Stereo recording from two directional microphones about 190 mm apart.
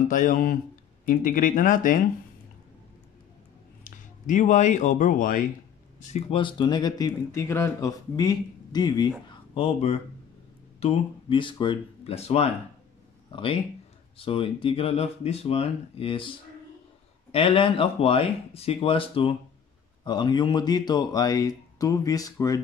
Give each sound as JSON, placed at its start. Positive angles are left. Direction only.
{"t": 0.1, "sound": "speech", "side_deg": 45}
{"t": 3.8, "sound": "speech", "side_deg": 40}
{"t": 6.0, "sound": "speech", "side_deg": 30}